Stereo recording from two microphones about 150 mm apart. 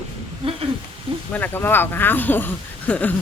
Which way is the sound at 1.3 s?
10° left (ahead or behind).